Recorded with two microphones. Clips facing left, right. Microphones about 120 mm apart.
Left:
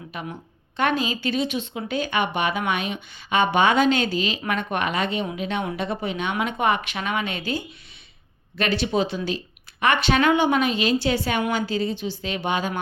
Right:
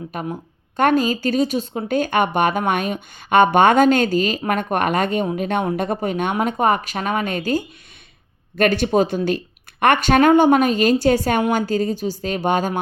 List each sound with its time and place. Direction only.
0.1 s speech: 45° right (ahead or behind)